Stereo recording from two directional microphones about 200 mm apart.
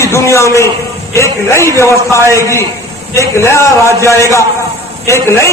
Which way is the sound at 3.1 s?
15° left (ahead or behind).